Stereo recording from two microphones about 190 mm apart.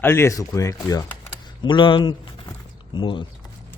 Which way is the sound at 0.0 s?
15° left (ahead or behind).